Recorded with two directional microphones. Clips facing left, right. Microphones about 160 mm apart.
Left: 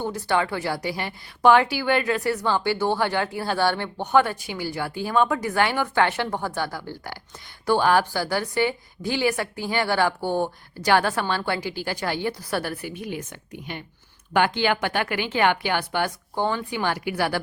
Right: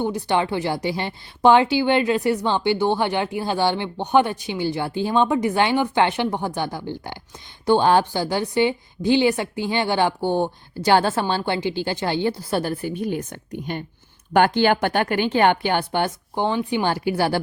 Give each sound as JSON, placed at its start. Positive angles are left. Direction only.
{"t": 0.0, "sound": "a woman's voice", "side_deg": -20}